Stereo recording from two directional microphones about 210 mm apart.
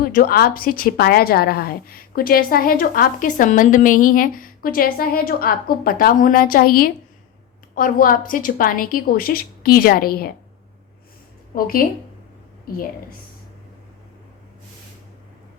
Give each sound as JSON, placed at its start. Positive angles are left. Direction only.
{"t": 0.1, "sound": "a woman's voice", "side_deg": 45}
{"t": 11.5, "sound": "a woman's voice", "side_deg": 45}